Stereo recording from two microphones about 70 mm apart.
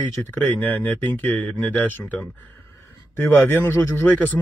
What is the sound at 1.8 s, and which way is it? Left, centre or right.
Speech, left.